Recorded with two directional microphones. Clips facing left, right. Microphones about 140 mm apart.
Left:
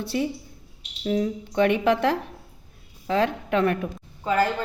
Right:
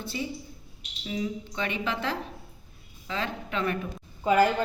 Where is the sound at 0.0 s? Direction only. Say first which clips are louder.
Left 8 dB; 70° left (ahead or behind).